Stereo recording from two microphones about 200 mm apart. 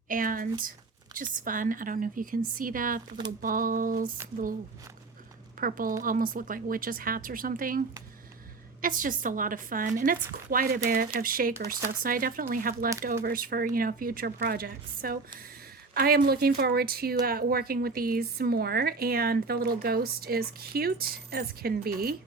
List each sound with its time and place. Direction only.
0.1 s speech: 45° right (ahead or behind)
5.5 s speech: 45° right (ahead or behind)